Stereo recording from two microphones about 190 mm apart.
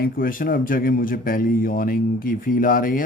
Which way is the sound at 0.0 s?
50° left (ahead or behind).